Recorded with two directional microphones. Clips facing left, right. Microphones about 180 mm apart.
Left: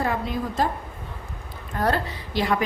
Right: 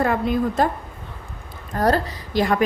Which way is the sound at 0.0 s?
55° right (ahead or behind).